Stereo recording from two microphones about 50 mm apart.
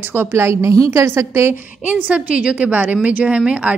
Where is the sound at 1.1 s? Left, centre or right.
Right.